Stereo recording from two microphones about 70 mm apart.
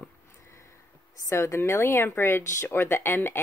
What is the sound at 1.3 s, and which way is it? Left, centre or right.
A woman's voice, left.